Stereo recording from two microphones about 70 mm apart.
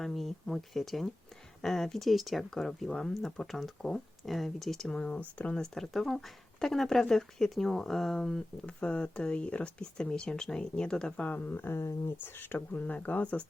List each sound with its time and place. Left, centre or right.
0.0 s speech: centre
5.7 s speech: centre; by 11.8 s left
11.8 s speech: left
12.2 s speech: left